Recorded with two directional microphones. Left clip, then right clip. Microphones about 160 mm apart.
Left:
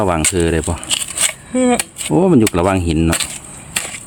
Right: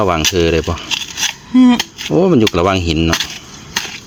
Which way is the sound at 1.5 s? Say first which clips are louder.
Right 3 dB; 60° left (ahead or behind).